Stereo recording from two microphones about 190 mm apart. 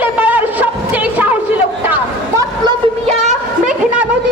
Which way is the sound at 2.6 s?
35° right (ahead or behind).